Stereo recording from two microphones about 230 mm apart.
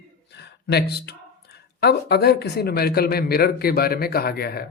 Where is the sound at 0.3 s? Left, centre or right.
Left.